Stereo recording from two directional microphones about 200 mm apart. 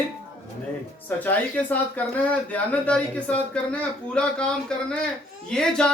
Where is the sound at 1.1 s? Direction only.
10° left (ahead or behind).